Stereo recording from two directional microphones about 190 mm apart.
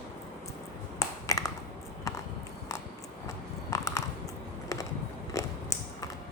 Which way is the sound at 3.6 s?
15° left (ahead or behind).